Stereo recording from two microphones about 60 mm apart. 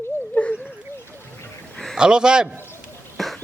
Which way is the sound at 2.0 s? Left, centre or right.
Centre.